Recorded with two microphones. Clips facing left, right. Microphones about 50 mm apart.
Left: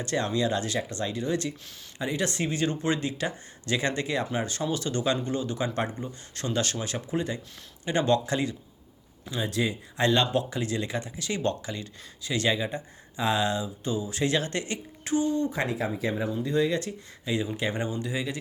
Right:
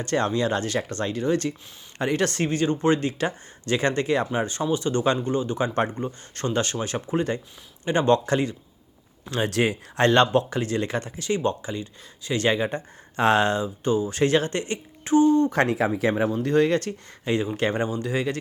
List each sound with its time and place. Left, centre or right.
0.0 s speech: right
2.0 s speech: right
9.3 s speech: right
10.0 s speech: right
10.3 s speech: right
11.3 s speech: right
15.4 s speech: right
17.6 s speech: right